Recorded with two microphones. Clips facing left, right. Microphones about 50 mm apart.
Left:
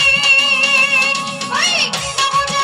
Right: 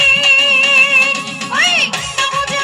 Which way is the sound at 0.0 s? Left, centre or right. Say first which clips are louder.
Right 2 dB; right.